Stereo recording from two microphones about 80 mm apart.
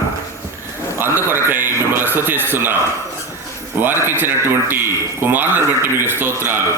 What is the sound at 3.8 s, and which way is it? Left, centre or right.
A man's voice, right.